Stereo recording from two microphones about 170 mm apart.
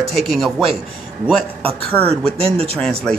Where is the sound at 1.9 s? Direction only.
10° left (ahead or behind).